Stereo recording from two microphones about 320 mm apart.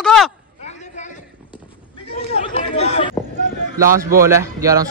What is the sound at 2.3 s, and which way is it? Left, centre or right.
Chatter, centre.